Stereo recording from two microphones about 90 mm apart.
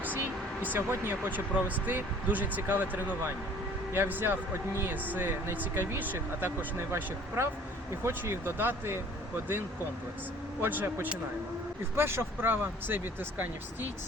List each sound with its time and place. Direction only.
0.6 s speech: 25° right (ahead or behind)
10.6 s speech: 20° right (ahead or behind)